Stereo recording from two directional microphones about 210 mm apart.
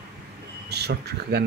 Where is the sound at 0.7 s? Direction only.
50° right (ahead or behind).